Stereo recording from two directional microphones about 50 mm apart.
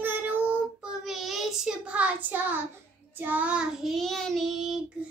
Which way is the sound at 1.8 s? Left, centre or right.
Right.